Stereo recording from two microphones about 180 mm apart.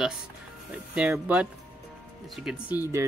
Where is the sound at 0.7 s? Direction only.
5° right (ahead or behind).